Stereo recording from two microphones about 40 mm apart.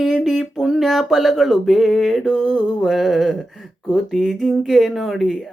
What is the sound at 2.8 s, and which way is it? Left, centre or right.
Speech, centre.